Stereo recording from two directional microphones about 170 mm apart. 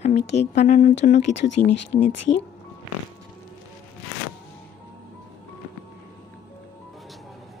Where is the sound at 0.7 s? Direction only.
60° left (ahead or behind); by 1.4 s 45° left (ahead or behind).